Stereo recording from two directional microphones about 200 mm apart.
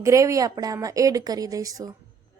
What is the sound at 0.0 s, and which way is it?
A woman's voice, 15° right (ahead or behind).